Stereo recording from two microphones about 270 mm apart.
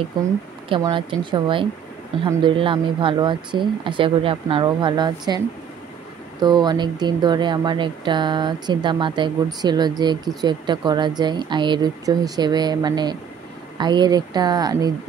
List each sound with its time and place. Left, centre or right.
0.2 s speech: centre
6.4 s speech: centre